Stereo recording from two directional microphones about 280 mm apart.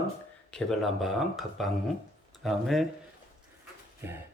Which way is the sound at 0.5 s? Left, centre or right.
Centre.